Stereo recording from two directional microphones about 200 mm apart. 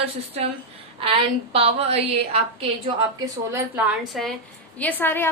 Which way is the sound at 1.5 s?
30° right (ahead or behind).